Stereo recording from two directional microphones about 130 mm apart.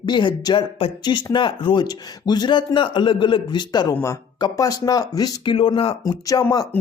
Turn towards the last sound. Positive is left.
turn(degrees=30)  # may be behind; listen again after turning